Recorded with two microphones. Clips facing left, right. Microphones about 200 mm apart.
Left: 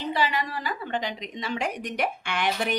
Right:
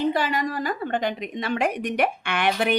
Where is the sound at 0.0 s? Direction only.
50° right (ahead or behind).